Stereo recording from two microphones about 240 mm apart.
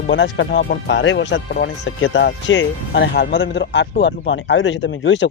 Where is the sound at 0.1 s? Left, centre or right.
Left.